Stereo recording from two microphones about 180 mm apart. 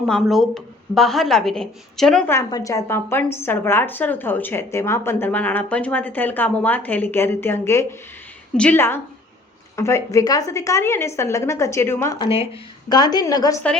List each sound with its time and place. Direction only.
0.0 s a woman's voice: centre (ahead or behind)
2.3 s a woman's voice: 20° left (ahead or behind)
12.2 s a woman's voice: 30° left (ahead or behind)